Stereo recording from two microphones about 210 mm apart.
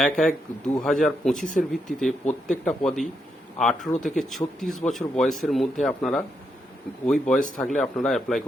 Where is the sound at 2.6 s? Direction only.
5° left (ahead or behind).